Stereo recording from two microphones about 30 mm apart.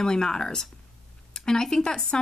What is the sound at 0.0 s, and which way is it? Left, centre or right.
Speech, left.